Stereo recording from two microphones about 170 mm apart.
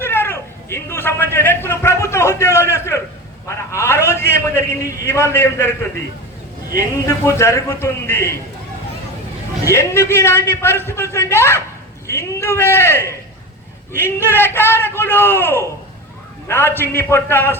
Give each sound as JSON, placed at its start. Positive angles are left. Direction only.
{"t": 0.0, "sound": "a man's voice", "side_deg": 15}
{"t": 9.6, "sound": "a man's voice", "side_deg": 15}